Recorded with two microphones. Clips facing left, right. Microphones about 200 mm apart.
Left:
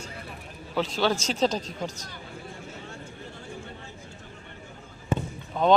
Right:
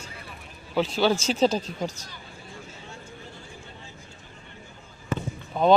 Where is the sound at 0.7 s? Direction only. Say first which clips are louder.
Right 3 dB; 5° right (ahead or behind).